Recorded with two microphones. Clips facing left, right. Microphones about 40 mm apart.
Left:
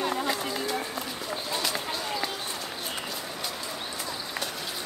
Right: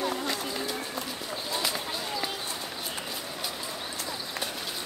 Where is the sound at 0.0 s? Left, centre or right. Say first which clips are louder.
Left 2 dB; left.